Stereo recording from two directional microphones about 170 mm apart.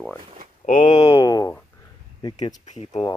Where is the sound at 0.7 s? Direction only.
25° left (ahead or behind).